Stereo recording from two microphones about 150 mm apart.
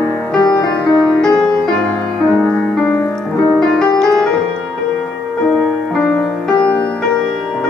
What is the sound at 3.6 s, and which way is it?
Music, 5° left (ahead or behind).